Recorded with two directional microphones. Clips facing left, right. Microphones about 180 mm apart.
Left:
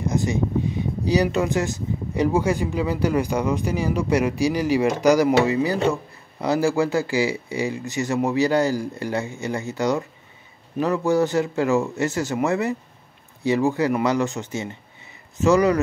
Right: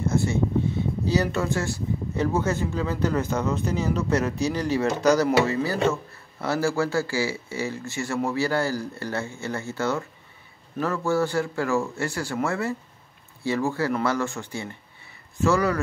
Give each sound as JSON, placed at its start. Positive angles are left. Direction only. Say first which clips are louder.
{"t": 0.0, "sound": "speech", "louder": "left 1 dB", "side_deg": 15}